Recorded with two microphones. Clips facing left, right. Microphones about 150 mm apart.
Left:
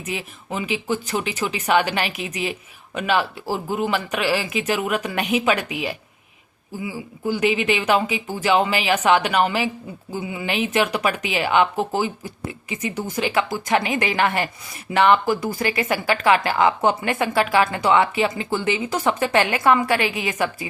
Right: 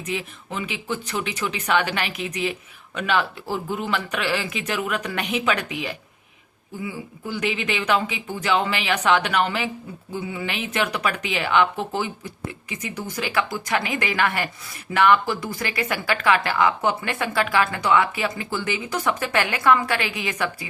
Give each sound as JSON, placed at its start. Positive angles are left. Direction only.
{"t": 0.1, "sound": "a woman's voice", "side_deg": 15}